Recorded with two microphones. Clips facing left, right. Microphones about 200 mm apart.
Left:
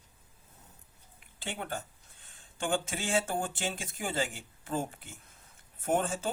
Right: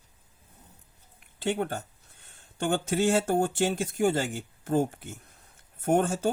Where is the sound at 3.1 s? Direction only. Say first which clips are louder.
Right 5 dB; 45° right (ahead or behind).